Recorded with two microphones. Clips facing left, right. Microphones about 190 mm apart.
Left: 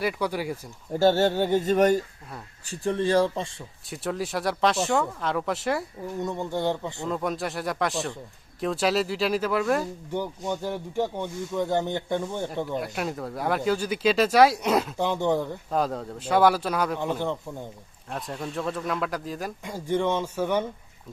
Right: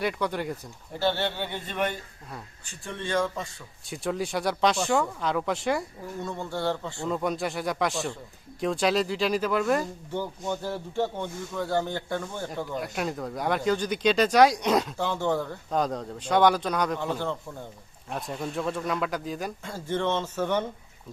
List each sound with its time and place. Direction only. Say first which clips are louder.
0.0 s speech: left 1 dB; 5° left (ahead or behind)
0.9 s speech: left 7 dB; 45° left (ahead or behind)
3.8 s speech: even; centre (ahead or behind)
6.2 s speech: left 2 dB; 15° left (ahead or behind)
7.1 s speech: right 1 dB; centre (ahead or behind)
10.1 s speech: left 3 dB; 15° left (ahead or behind)
12.6 s speech: left 1 dB; centre (ahead or behind)
14.9 s speech: left 3 dB; 20° left (ahead or behind)
15.7 s speech: even; 5° left (ahead or behind)
17.0 s speech: left 2 dB; 15° left (ahead or behind)
18.1 s speech: even; centre (ahead or behind)
19.6 s speech: left 3 dB; 15° left (ahead or behind)